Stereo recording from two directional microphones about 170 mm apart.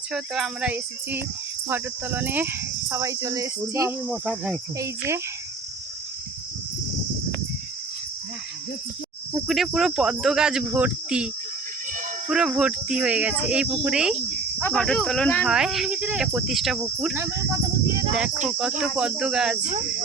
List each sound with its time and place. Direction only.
0.1 s speech: 5° right (ahead or behind); by 3.9 s 20° right (ahead or behind)
4.1 s speech: 5° right (ahead or behind)
9.5 s speech: centre (ahead or behind)
12.3 s speech: 5° right (ahead or behind)
18.4 s speech: 5° right (ahead or behind)